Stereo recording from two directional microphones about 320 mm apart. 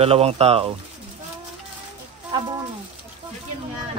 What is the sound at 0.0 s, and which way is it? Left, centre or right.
Speech, centre.